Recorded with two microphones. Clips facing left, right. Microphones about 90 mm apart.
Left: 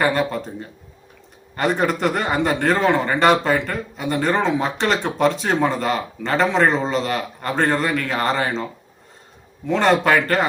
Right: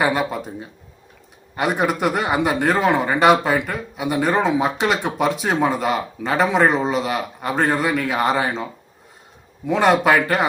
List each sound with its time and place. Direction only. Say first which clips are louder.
0.0 s a man's voice: even; 10° right (ahead or behind)
9.6 s a man's voice: right 1 dB; 10° right (ahead or behind)